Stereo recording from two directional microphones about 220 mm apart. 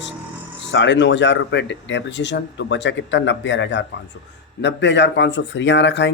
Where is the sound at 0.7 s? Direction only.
55° left (ahead or behind).